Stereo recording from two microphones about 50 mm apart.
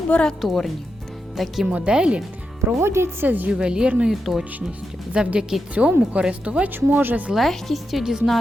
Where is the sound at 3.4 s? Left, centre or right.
Centre.